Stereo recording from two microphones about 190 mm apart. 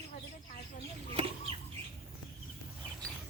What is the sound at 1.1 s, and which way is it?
Chicken, 30° right (ahead or behind).